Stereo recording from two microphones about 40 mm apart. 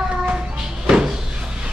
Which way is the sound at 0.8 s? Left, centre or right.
Centre.